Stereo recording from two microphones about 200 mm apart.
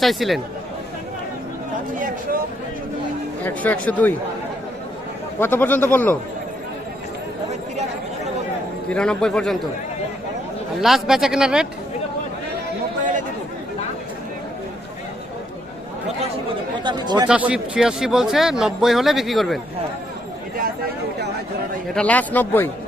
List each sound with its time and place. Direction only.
0.0 s speech: centre (ahead or behind)
3.4 s speech: 10° left (ahead or behind)
5.4 s speech: 10° left (ahead or behind)
8.9 s speech: 5° left (ahead or behind)
10.8 s speech: centre (ahead or behind)
16.8 s speech: 20° right (ahead or behind)
17.2 s speech: 5° right (ahead or behind)
21.9 s speech: 5° left (ahead or behind)